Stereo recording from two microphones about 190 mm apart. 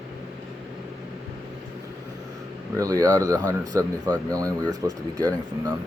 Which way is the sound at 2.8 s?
20° right (ahead or behind).